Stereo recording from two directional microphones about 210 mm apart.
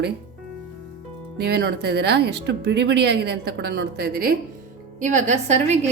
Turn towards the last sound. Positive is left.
turn(degrees=-30)  # may be behind; listen again after turning